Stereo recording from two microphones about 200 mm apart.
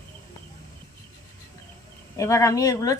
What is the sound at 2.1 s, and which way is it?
Speech, 15° left (ahead or behind).